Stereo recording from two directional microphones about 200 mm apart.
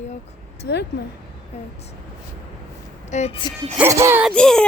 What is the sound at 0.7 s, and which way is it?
Speech, 55° left (ahead or behind).